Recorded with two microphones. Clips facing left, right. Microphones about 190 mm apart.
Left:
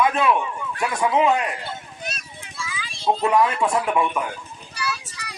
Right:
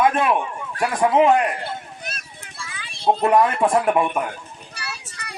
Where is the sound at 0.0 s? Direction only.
50° right (ahead or behind).